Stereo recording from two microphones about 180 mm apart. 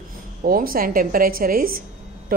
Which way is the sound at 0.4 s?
55° right (ahead or behind).